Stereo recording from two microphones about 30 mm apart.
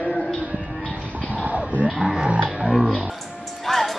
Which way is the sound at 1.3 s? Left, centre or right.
Right.